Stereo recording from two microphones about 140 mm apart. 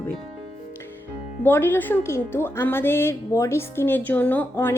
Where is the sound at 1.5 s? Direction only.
15° left (ahead or behind).